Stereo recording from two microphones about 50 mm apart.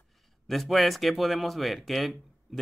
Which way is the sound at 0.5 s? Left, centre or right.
Centre.